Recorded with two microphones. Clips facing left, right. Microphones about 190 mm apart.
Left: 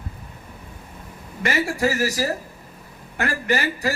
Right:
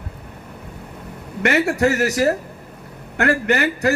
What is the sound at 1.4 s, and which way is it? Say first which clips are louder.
Speech: right 5 dB; 65° right (ahead or behind).